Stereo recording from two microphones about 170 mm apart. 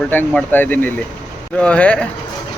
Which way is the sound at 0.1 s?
10° left (ahead or behind).